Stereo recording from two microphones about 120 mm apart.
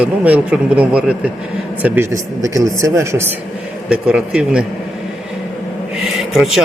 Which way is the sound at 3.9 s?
10° right (ahead or behind).